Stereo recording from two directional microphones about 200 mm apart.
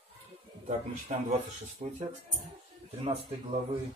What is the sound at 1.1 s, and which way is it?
Speech, 40° right (ahead or behind).